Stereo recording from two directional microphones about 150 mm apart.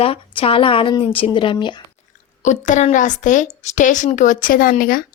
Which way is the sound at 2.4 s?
55° left (ahead or behind).